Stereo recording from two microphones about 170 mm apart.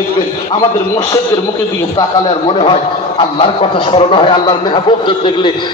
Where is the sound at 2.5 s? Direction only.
30° left (ahead or behind).